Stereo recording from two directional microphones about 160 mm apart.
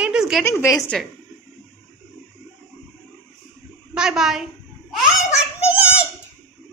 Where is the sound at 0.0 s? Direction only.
5° right (ahead or behind).